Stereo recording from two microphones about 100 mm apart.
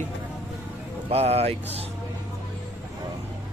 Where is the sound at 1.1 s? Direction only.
90° right.